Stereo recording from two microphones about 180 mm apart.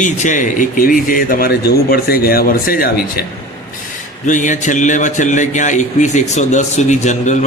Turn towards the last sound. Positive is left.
turn(degrees=40)  # may be behind; listen again after turning